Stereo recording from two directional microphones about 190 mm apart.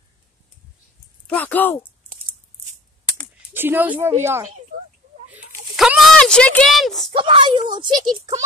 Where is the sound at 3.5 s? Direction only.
10° right (ahead or behind).